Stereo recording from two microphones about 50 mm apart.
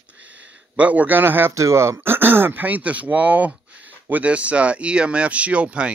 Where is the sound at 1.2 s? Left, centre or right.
Right.